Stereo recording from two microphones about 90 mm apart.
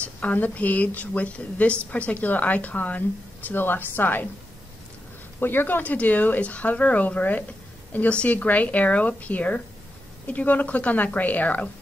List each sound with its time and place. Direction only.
0.2 s a woman's voice: 15° left (ahead or behind)
5.4 s a woman's voice: 25° left (ahead or behind)